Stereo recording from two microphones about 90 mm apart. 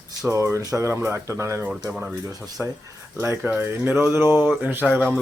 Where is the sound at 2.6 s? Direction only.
20° right (ahead or behind).